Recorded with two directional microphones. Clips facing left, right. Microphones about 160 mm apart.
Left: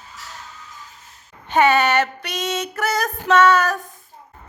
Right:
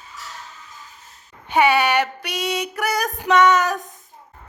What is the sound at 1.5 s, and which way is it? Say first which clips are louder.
Female singing: left 1 dB; 10° right (ahead or behind).